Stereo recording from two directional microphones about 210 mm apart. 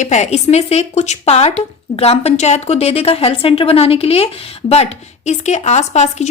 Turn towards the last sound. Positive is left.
turn(degrees=35)  # may be behind; listen again after turning